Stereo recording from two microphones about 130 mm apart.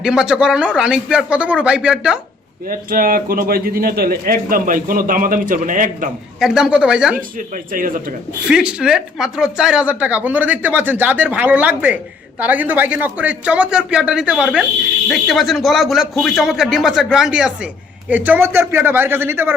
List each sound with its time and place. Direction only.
0.0 s a man's voice: 5° right (ahead or behind)
2.6 s a man's voice: 90° right
4.4 s a man's voice: 90° right
6.4 s a man's voice: 5° right (ahead or behind)
7.2 s a man's voice: 90° right
8.4 s a man's voice: 5° right (ahead or behind)